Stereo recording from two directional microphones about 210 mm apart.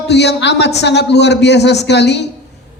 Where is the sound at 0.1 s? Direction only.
55° left (ahead or behind).